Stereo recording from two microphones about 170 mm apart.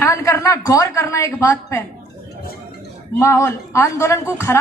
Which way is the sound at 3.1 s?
15° left (ahead or behind).